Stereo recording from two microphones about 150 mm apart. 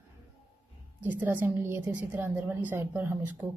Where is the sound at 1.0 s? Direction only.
10° right (ahead or behind).